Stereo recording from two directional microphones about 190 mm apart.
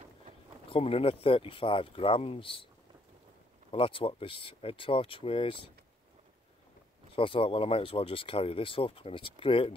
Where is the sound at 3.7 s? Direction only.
30° left (ahead or behind).